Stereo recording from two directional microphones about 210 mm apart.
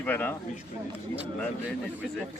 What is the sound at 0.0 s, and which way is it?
Speech, 10° left (ahead or behind).